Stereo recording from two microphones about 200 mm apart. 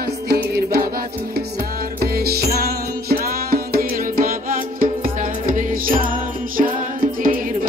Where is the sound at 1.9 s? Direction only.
50° right (ahead or behind).